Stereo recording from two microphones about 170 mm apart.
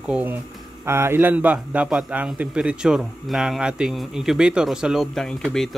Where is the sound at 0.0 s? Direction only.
10° right (ahead or behind).